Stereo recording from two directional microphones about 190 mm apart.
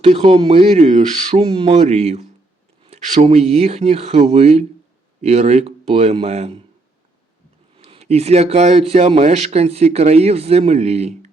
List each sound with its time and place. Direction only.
0.0 s speech: 30° right (ahead or behind)
7.8 s speech: 35° right (ahead or behind)